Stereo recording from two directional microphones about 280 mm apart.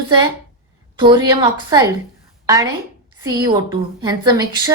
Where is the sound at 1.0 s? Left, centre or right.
Centre.